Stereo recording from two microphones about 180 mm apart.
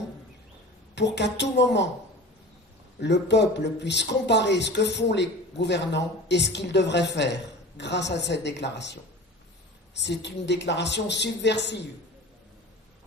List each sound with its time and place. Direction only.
0.9 s speech: 75° left (ahead or behind)
3.0 s speech: 70° left (ahead or behind)